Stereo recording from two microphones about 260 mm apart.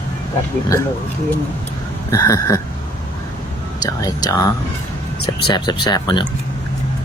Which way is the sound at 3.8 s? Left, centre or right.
Centre.